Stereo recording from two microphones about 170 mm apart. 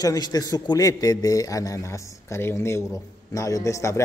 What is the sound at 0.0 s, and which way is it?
A man's voice, 20° left (ahead or behind).